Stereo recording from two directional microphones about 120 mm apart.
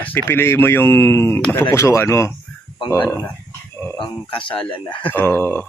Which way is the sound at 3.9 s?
45° left (ahead or behind).